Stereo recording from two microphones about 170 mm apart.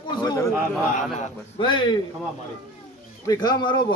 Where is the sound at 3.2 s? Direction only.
25° left (ahead or behind).